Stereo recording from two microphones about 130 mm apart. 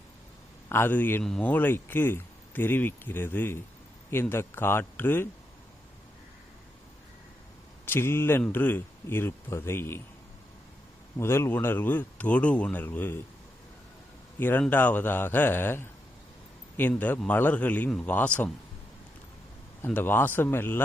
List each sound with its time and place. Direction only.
0.7 s speech: 15° left (ahead or behind)
7.9 s speech: 20° left (ahead or behind)
11.2 s speech: 20° left (ahead or behind)
14.3 s speech: 15° left (ahead or behind)
16.9 s speech: 10° left (ahead or behind)
19.8 s speech: 15° left (ahead or behind)